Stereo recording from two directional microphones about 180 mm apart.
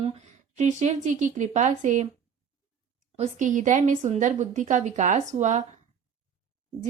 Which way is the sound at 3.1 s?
40° right (ahead or behind).